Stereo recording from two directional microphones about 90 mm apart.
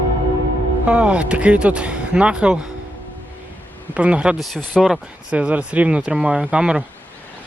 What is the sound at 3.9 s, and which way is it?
Speech, 10° right (ahead or behind).